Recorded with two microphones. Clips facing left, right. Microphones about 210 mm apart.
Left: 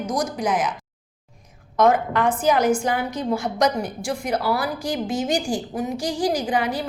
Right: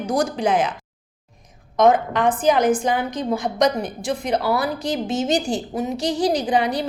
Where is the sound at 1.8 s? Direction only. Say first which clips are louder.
Right 2 dB; 20° right (ahead or behind).